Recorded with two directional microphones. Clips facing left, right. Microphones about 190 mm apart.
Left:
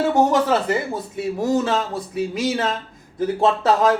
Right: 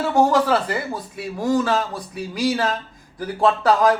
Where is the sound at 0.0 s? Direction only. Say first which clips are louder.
Even; 20° left (ahead or behind).